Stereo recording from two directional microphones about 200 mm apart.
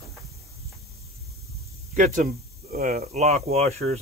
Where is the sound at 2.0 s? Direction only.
40° right (ahead or behind).